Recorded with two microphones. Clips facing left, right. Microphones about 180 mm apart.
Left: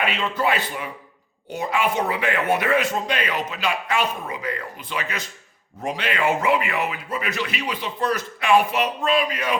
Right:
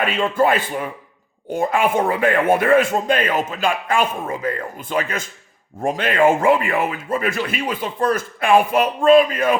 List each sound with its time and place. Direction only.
0.0 s speech: 45° right (ahead or behind)